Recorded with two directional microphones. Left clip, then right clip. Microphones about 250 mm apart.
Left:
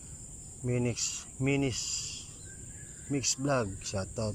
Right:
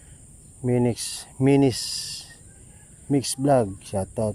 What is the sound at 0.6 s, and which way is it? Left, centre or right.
Speech, right.